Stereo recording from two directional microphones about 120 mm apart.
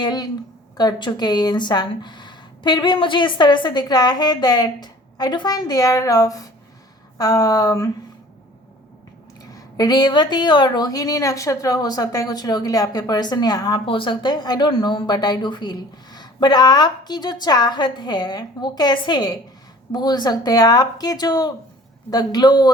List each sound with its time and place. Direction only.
0.0 s speech: 35° left (ahead or behind)
9.4 s speech: 30° left (ahead or behind)